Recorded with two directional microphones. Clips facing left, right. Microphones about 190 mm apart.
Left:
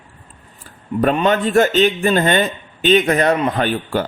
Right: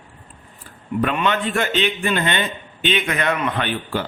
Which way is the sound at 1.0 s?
40° left (ahead or behind).